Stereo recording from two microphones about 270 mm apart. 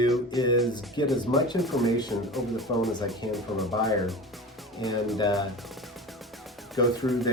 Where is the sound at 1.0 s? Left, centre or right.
Centre.